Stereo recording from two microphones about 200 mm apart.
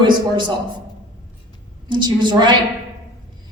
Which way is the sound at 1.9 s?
20° right (ahead or behind).